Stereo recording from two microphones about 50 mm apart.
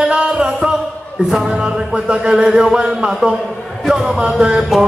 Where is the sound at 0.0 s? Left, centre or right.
Right.